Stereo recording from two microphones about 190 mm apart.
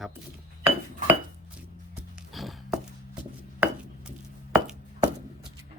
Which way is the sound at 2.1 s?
Centre (ahead or behind).